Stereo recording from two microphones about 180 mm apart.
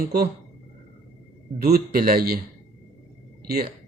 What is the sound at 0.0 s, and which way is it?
Speech, 60° right (ahead or behind).